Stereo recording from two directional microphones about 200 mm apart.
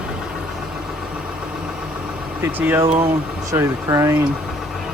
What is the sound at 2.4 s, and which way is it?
Speech, 10° right (ahead or behind).